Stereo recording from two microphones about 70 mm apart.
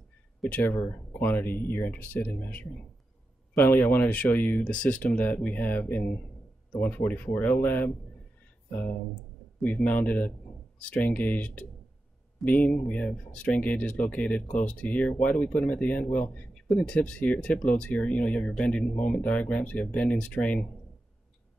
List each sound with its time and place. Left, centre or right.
0.5 s speech: left